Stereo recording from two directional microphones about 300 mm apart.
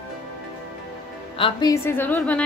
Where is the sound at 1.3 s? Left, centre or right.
Centre.